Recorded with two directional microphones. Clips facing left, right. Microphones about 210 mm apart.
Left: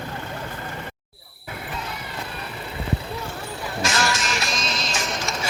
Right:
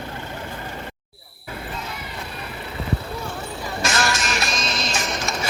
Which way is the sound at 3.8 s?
55° right (ahead or behind).